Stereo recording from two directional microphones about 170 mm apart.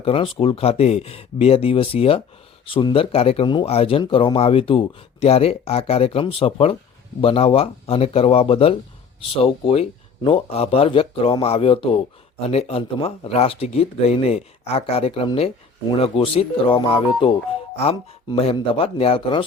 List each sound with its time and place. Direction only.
0.0 s a man's voice: 35° left (ahead or behind)